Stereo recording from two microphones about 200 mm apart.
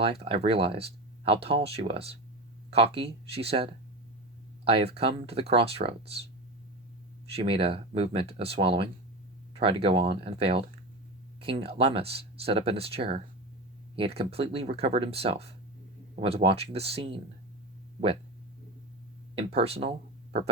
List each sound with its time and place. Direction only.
0.0 s speech: 30° right (ahead or behind)
7.3 s speech: 30° right (ahead or behind)
19.4 s speech: 30° right (ahead or behind)